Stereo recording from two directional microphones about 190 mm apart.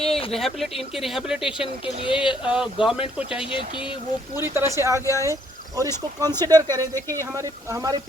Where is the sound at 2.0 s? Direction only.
25° left (ahead or behind).